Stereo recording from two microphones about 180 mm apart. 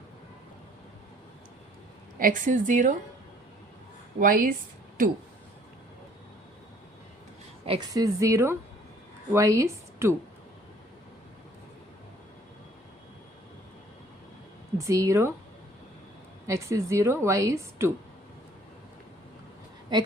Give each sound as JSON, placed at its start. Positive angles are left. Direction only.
{"t": 2.1, "sound": "a woman's voice", "side_deg": -50}
{"t": 4.2, "sound": "a woman's voice", "side_deg": -50}
{"t": 7.6, "sound": "a woman's voice", "side_deg": -25}
{"t": 14.8, "sound": "a woman's voice", "side_deg": -15}
{"t": 16.5, "sound": "a woman's voice", "side_deg": -15}
{"t": 19.9, "sound": "a woman's voice", "side_deg": -25}